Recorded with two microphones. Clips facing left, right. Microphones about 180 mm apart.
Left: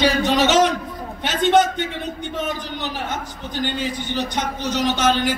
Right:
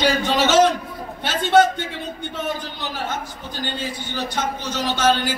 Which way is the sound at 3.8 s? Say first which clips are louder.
Left 3 dB; 15° left (ahead or behind).